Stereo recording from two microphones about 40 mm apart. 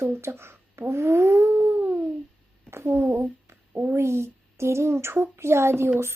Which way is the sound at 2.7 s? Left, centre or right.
Right.